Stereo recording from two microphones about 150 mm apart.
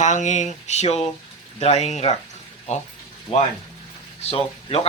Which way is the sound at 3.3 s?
45° left (ahead or behind).